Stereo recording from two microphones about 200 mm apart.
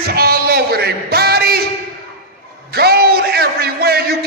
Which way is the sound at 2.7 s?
50° right (ahead or behind).